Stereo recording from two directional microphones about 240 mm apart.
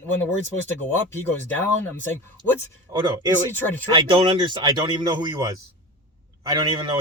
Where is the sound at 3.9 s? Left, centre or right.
Right.